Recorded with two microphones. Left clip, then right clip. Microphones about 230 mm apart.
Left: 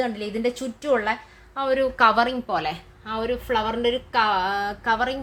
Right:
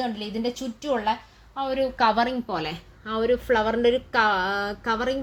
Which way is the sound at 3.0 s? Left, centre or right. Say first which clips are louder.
Right 3 dB; left.